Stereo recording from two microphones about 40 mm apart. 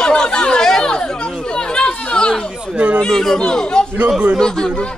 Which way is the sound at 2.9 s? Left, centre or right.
Centre.